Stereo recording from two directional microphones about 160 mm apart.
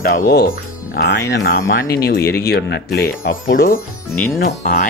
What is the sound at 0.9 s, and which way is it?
Speech, 90° left.